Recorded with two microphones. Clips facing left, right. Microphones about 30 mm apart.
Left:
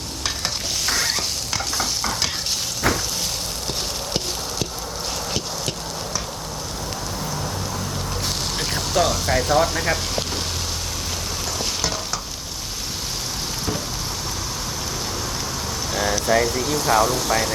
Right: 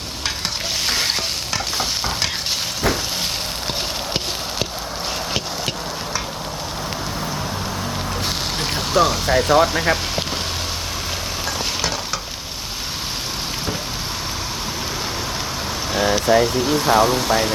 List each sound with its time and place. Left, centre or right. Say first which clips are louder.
0.9 s stir: right 1 dB; right
8.5 s a sound: right 4 dB; centre
9.6 s speech: right 3 dB; right
11.8 s stir: right 2 dB; centre
16.0 s speech: right 4 dB; right